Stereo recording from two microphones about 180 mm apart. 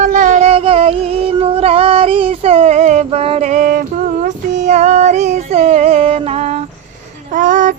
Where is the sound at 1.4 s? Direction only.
35° right (ahead or behind).